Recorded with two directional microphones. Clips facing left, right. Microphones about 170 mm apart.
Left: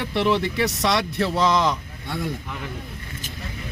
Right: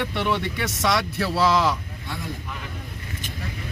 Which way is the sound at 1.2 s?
20° left (ahead or behind).